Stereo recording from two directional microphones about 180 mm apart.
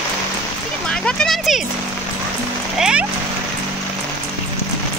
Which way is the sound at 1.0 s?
Centre (ahead or behind).